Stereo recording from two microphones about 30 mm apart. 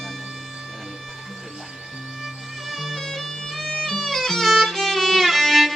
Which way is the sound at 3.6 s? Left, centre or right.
Centre.